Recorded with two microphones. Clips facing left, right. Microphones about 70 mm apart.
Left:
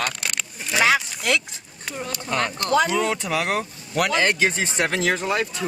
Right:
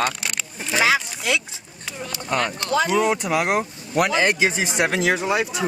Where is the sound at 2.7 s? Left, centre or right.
Centre.